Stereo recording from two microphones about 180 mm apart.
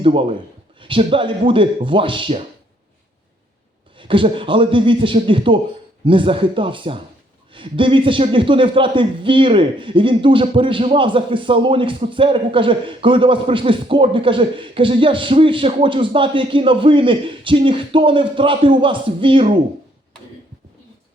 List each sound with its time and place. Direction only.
0.0 s a man's voice: 30° right (ahead or behind)
3.9 s a man's voice: 30° right (ahead or behind)